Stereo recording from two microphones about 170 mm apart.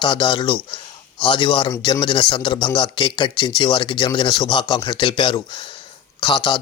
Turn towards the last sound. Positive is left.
turn(degrees=25)  # may be behind; listen again after turning